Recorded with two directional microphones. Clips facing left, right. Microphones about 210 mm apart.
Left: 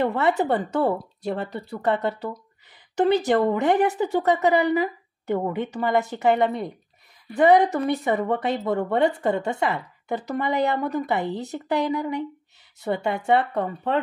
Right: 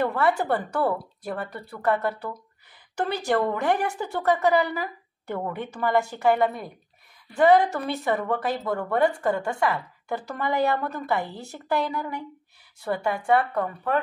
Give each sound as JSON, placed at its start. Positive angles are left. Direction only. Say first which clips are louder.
{"t": 0.0, "sound": "a woman's voice", "louder": "left 2 dB", "side_deg": 20}